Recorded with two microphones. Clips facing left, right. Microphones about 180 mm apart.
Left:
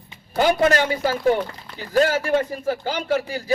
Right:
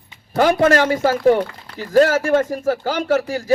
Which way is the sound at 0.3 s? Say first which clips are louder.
Right 3 dB; 50° right (ahead or behind).